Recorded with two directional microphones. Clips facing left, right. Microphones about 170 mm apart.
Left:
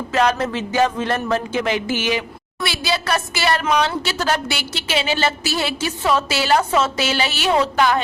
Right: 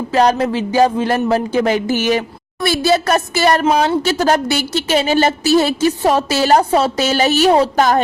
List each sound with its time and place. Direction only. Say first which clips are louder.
0.1 s speech: right 5 dB; 35° right (ahead or behind)